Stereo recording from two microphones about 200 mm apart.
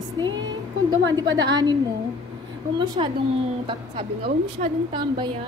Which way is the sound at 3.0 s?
25° right (ahead or behind).